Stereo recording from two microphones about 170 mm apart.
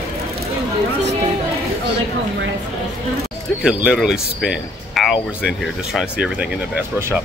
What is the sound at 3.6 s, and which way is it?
Speech, 5° right (ahead or behind).